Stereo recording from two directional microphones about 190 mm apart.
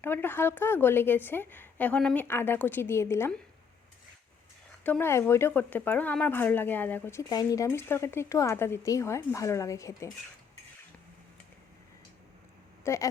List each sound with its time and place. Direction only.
0.0 s speech: 10° left (ahead or behind)
4.8 s speech: 10° left (ahead or behind)
12.8 s speech: 15° left (ahead or behind)